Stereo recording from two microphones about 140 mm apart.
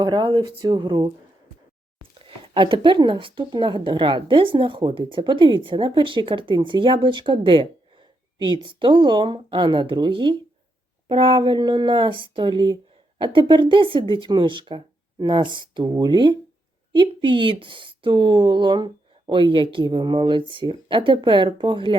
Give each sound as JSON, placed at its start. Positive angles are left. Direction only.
{"t": 0.0, "sound": "speech", "side_deg": -35}
{"t": 2.2, "sound": "speech", "side_deg": -35}